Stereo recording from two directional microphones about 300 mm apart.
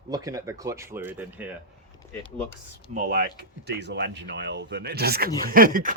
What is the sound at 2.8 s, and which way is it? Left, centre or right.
Speech, right.